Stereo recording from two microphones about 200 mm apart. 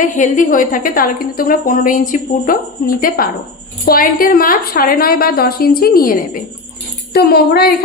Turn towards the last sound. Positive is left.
turn(degrees=50)  # may be behind; listen again after turning